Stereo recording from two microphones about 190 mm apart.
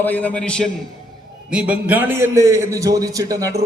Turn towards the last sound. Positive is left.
turn(degrees=-20)  # may be behind; listen again after turning